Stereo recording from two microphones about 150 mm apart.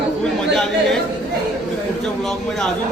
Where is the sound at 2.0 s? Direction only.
Centre (ahead or behind).